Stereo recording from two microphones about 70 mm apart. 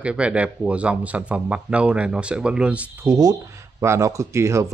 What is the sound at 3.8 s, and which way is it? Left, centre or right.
Speech, right.